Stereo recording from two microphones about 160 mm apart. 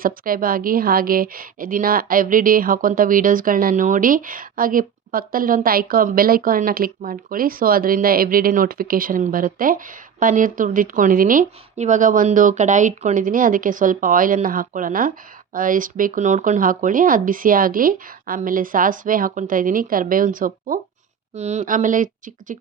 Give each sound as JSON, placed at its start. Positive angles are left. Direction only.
{"t": 0.0, "sound": "a woman's voice", "side_deg": -65}
{"t": 21.3, "sound": "speech", "side_deg": -45}